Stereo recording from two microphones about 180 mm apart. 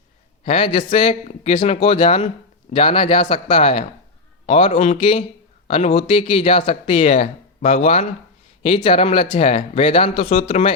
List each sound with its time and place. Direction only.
0.4 s a man's voice: 30° left (ahead or behind)